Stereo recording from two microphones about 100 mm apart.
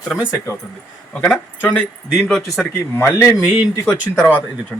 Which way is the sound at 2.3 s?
Centre (ahead or behind).